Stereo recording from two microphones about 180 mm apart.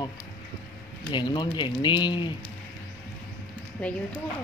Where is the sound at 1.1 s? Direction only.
25° left (ahead or behind).